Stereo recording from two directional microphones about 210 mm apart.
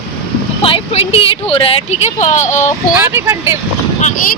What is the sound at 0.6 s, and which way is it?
Speech, 25° left (ahead or behind).